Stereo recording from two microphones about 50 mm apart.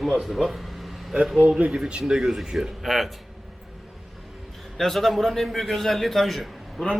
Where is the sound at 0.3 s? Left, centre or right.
Centre.